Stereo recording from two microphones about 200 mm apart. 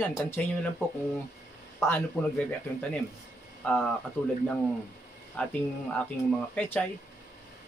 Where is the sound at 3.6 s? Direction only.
5° left (ahead or behind).